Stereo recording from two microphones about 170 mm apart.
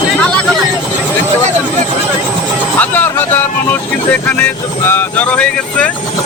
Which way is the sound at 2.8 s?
10° left (ahead or behind).